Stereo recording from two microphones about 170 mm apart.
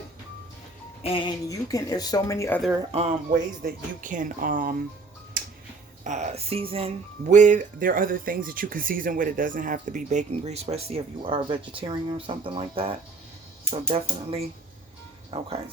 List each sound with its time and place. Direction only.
1.0 s speech: 30° left (ahead or behind)
1.5 s speech: 20° left (ahead or behind)
2.9 s speech: 40° right (ahead or behind)
6.1 s speech: 40° right (ahead or behind)